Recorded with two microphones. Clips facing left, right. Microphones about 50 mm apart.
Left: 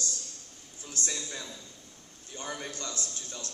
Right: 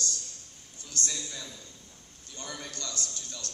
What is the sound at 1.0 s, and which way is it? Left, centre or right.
A man's voice, left.